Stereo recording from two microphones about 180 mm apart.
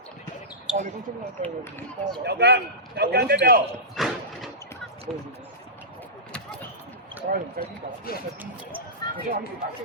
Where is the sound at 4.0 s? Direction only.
Centre (ahead or behind).